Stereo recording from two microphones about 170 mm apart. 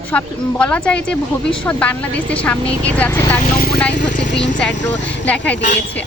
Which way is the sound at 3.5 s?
60° left (ahead or behind).